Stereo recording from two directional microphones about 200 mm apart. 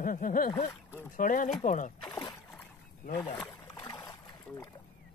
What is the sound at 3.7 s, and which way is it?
Boat, 20° left (ahead or behind).